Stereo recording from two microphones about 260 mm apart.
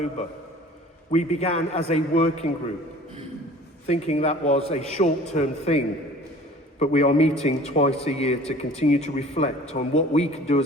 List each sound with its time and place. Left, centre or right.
1.1 s a man's voice: left
3.8 s a man's voice: left